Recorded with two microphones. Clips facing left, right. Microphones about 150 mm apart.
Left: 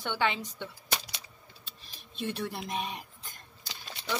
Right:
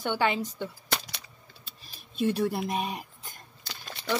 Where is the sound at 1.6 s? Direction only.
5° right (ahead or behind).